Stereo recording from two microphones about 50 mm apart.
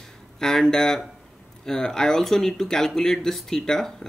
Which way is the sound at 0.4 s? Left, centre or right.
Centre.